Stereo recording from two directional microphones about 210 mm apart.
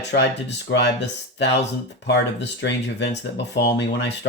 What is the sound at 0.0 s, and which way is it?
Speech, 55° left (ahead or behind).